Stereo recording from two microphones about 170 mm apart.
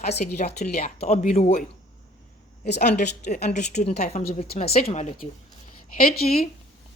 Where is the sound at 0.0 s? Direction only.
40° left (ahead or behind).